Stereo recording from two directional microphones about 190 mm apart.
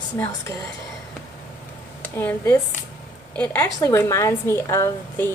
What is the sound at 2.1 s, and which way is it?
A woman's voice, 15° left (ahead or behind).